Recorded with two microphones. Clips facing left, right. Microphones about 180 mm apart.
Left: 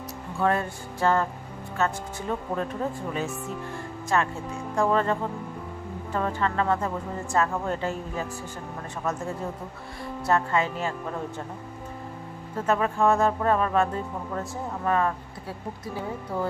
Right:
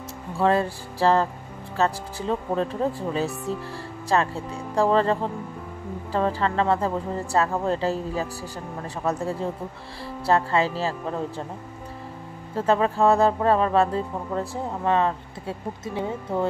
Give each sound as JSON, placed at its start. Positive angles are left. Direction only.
{"t": 0.4, "sound": "speech", "side_deg": -30}
{"t": 12.5, "sound": "speech", "side_deg": -30}